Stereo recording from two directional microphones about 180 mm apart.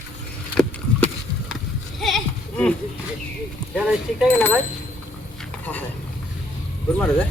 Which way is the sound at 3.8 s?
5° right (ahead or behind).